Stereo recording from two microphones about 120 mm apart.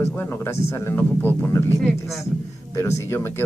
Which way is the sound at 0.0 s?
20° left (ahead or behind).